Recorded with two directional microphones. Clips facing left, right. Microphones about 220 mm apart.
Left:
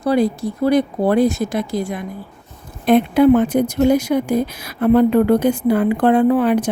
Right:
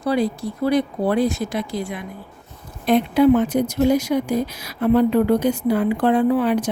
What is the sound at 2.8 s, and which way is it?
Speech, 55° left (ahead or behind).